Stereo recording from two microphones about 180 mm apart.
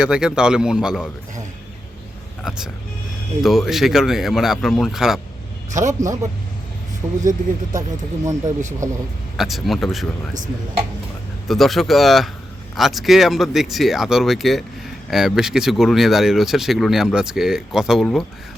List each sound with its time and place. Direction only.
0.0 s speech: 5° right (ahead or behind)
2.4 s speech: centre (ahead or behind)
7.2 s speech: 45° right (ahead or behind)
7.8 s speech: 20° right (ahead or behind)
9.4 s speech: centre (ahead or behind)
11.4 s speech: centre (ahead or behind)